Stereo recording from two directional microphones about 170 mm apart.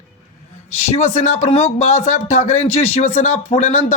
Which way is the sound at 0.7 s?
40° left (ahead or behind).